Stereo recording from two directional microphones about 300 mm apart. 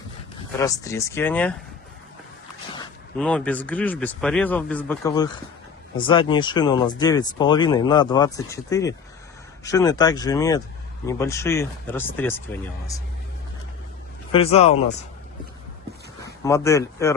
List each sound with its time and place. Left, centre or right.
0.6 s speech: centre
3.2 s speech: centre
14.3 s speech: centre
16.2 s speech: centre